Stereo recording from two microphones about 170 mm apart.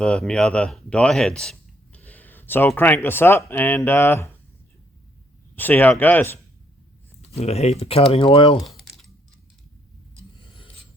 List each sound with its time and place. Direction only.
0.0 s speech: 5° left (ahead or behind)
5.5 s speech: 10° left (ahead or behind)
7.3 s speech: 40° left (ahead or behind)
8.6 s typing: centre (ahead or behind)